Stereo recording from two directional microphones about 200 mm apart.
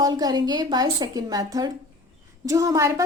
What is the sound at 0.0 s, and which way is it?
A woman's voice, 20° right (ahead or behind).